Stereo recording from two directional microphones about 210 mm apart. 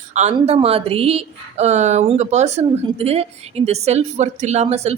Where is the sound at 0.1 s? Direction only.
30° right (ahead or behind).